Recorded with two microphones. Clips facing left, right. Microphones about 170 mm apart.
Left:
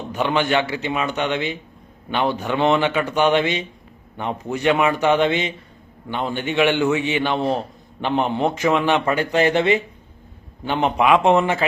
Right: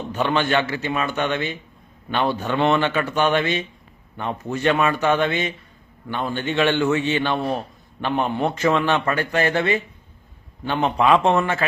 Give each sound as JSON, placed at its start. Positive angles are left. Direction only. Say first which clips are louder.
{"t": 0.1, "sound": "a man's voice", "louder": "left 1 dB", "side_deg": 15}